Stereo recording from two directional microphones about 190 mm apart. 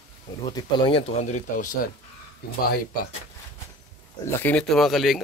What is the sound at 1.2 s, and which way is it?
Speech, 40° left (ahead or behind).